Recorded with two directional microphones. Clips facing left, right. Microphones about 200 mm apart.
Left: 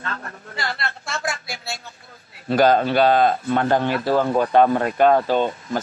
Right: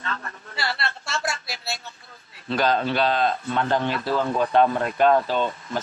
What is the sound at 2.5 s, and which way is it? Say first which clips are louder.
Speech: left 6 dB; 50° left (ahead or behind).